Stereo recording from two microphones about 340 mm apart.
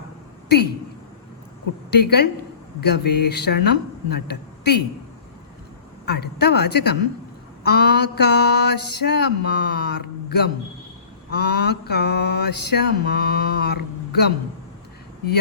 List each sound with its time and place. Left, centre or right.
0.4 s speech: left
1.9 s mantra: left
6.1 s mantra: left